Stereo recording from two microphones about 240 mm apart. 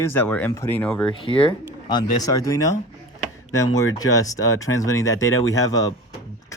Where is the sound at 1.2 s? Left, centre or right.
Left.